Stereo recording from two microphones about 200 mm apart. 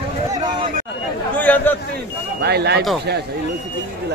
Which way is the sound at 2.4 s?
55° right (ahead or behind).